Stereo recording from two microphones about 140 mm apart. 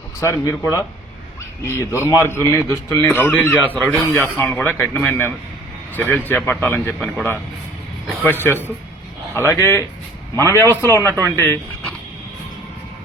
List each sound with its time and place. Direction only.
0.2 s a man's voice: 20° left (ahead or behind)
8.4 s a man's voice: 15° left (ahead or behind)